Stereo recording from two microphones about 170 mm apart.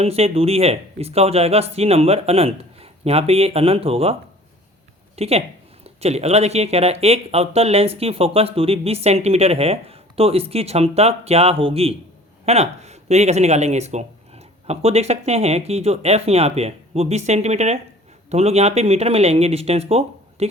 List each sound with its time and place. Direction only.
0.0 s speech: 35° right (ahead or behind)